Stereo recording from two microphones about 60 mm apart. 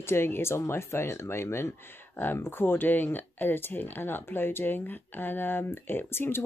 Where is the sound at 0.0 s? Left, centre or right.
Left.